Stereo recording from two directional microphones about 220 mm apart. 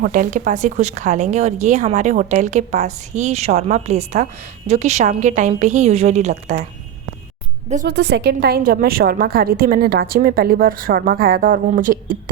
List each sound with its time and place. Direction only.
0.0 s a woman's voice: 35° right (ahead or behind)
7.9 s a woman's voice: 50° right (ahead or behind)